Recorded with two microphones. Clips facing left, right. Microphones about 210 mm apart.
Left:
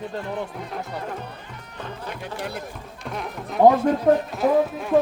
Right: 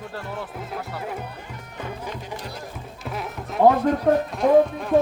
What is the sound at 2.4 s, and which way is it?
Speech, 60° left (ahead or behind).